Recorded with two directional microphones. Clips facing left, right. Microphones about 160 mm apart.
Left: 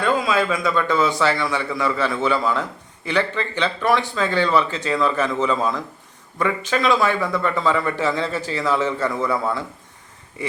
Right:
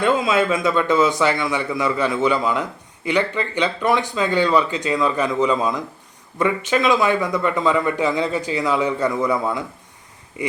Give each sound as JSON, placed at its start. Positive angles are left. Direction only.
{"t": 0.0, "sound": "a man's voice", "side_deg": -25}